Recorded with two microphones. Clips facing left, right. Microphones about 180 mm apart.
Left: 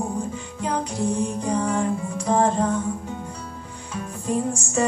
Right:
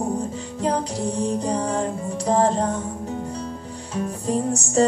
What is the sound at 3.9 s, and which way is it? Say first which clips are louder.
Music: right 2 dB; 35° right (ahead or behind).